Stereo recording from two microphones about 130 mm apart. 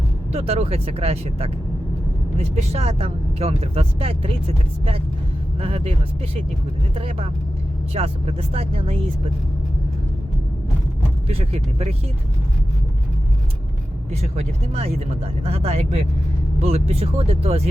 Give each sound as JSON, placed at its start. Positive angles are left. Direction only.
{"t": 0.3, "sound": "speech", "side_deg": -50}
{"t": 5.5, "sound": "speech", "side_deg": -50}
{"t": 6.9, "sound": "speech", "side_deg": -50}
{"t": 11.3, "sound": "speech", "side_deg": -50}
{"t": 14.1, "sound": "speech", "side_deg": -55}